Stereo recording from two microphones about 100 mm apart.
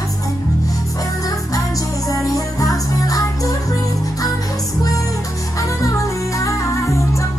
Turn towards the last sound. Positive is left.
turn(degrees=30)  # may be behind; listen again after turning